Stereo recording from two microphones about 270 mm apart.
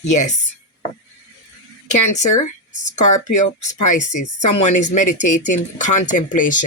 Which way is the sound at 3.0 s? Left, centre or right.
Left.